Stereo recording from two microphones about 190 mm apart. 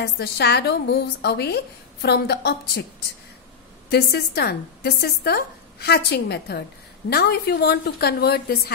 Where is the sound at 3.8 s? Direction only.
55° left (ahead or behind).